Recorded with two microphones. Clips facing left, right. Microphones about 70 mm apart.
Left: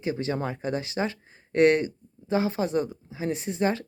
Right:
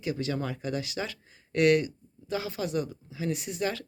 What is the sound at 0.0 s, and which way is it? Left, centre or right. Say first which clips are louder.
Speech: left 3 dB; left.